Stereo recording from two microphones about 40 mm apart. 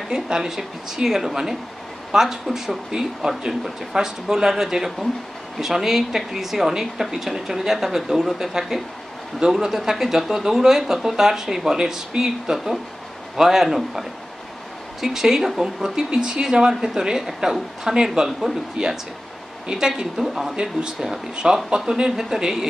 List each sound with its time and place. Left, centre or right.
0.1 s a man's voice: centre
20.0 s speech: centre